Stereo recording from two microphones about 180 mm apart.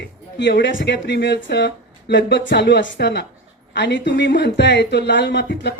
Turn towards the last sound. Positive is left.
turn(degrees=70)  # may be behind; listen again after turning